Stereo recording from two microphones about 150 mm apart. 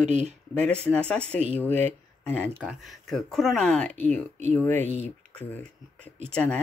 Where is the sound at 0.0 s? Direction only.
50° right (ahead or behind).